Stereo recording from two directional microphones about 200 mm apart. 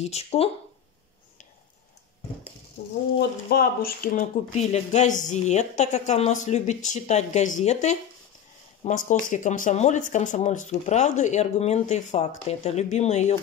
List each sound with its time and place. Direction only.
0.0 s speech: 30° left (ahead or behind)
2.8 s speech: 60° left (ahead or behind)
4.6 s speech: 35° left (ahead or behind)